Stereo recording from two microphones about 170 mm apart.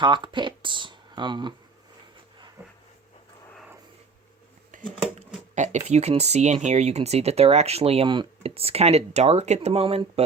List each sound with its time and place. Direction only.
0.0 s speech: 25° right (ahead or behind)
4.7 s a sound: 55° right (ahead or behind)
5.5 s speech: 45° right (ahead or behind)